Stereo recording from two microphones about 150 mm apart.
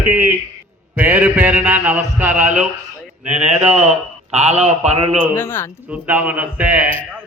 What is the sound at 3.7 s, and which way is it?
A man's voice, 50° right (ahead or behind).